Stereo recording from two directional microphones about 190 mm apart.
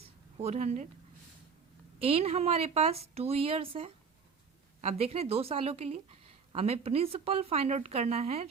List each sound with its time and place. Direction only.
0.3 s speech: 35° right (ahead or behind)
2.0 s speech: 30° right (ahead or behind)